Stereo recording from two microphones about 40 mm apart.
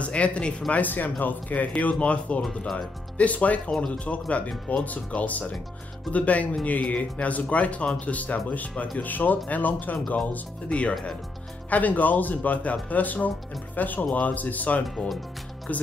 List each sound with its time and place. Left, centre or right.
0.0 s speech: left
0.7 s speech: left
10.1 s speech: left
11.7 s speech: left